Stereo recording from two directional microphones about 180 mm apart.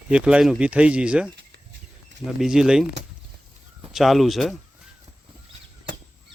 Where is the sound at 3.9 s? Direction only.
Centre (ahead or behind).